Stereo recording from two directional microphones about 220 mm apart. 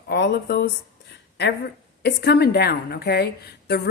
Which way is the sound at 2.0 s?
50° left (ahead or behind).